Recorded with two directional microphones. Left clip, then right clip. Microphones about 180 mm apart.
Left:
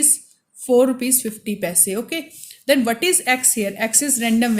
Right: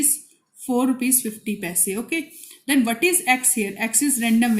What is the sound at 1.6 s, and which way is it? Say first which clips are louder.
A woman's voice: left 6 dB; 40° left (ahead or behind).